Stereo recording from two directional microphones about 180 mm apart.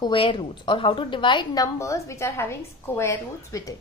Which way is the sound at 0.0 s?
30° left (ahead or behind).